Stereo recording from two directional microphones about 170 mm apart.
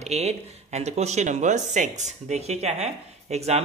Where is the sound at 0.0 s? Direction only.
40° right (ahead or behind).